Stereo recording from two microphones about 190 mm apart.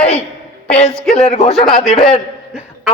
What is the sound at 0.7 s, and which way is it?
Speech, 35° left (ahead or behind).